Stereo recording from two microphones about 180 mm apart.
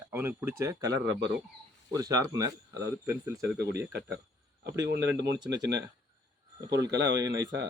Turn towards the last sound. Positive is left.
turn(degrees=-20)  # may be behind; listen again after turning